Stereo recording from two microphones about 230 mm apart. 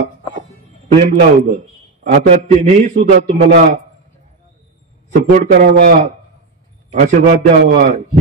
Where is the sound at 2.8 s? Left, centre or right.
Right.